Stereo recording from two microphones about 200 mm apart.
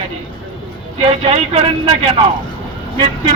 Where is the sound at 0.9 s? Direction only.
30° right (ahead or behind).